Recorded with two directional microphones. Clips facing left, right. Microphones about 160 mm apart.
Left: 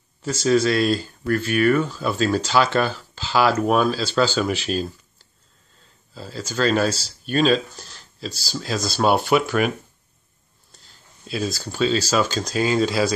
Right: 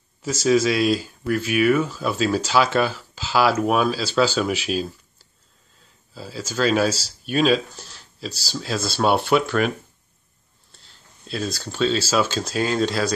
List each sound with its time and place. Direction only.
0.2 s speech: 5° right (ahead or behind)
6.1 s speech: 5° right (ahead or behind)
10.7 s speech: centre (ahead or behind)